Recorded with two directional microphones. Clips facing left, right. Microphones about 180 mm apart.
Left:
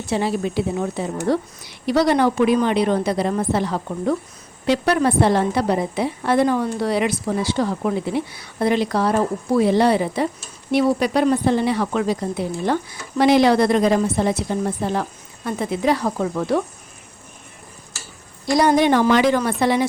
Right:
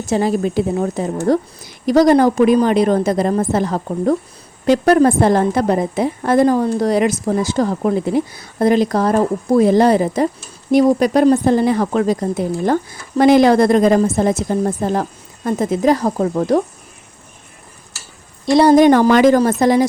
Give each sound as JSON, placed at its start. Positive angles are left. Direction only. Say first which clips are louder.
{"t": 0.0, "sound": "a woman's voice", "louder": "right 5 dB", "side_deg": -45}
{"t": 18.4, "sound": "a woman's voice", "louder": "right 6 dB", "side_deg": -25}
{"t": 18.7, "sound": "a woman's voice", "louder": "right 6 dB", "side_deg": -45}